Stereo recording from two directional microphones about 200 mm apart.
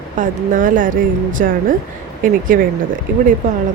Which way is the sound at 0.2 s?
40° right (ahead or behind).